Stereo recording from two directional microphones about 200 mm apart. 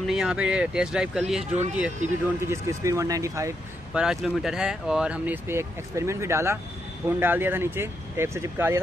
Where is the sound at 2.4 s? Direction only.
15° right (ahead or behind).